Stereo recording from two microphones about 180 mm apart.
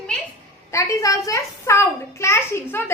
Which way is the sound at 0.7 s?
15° left (ahead or behind).